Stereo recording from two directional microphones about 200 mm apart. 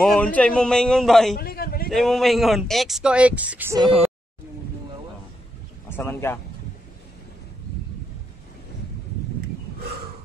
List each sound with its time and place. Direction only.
0.0 s speech: 5° left (ahead or behind)
1.3 s a sound: 50° left (ahead or behind)
1.9 s speech: centre (ahead or behind)
5.9 s speech: 10° left (ahead or behind)